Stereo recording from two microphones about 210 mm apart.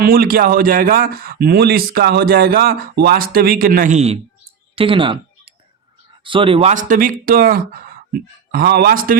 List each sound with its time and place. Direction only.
0.0 s a man's voice: 45° right (ahead or behind); by 5.2 s 25° right (ahead or behind)
6.2 s a man's voice: 25° right (ahead or behind); by 9.1 s 45° right (ahead or behind)